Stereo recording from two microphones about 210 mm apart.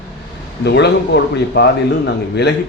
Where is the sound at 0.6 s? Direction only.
55° left (ahead or behind).